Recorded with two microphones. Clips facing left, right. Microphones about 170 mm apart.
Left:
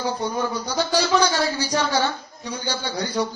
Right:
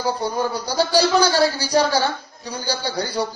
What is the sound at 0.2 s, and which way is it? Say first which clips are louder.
A man's voice: right 2 dB; 35° right (ahead or behind).